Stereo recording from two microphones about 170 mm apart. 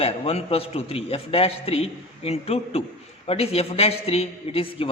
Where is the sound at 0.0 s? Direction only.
35° left (ahead or behind).